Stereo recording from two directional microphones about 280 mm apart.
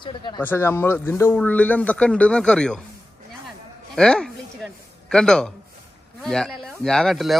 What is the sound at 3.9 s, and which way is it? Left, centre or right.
Speech, centre.